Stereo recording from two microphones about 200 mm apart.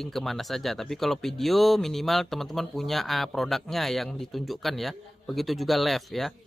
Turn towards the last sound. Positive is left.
turn(degrees=0)  # may be behind; listen again after turning